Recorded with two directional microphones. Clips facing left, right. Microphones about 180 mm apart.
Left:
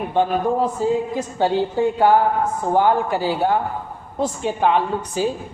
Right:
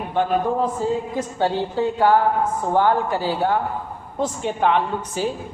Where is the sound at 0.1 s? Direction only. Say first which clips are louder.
Left 1 dB; 20° left (ahead or behind).